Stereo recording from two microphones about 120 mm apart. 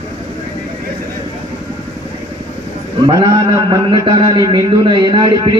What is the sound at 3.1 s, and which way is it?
A man's voice, 35° right (ahead or behind).